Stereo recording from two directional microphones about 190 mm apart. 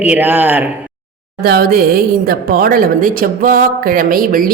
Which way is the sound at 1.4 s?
55° right (ahead or behind).